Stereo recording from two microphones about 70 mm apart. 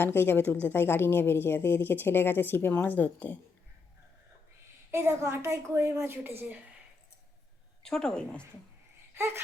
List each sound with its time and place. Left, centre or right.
0.0 s a woman's voice: left
4.9 s a woman's voice: right
7.9 s speech: centre
9.1 s a sound: right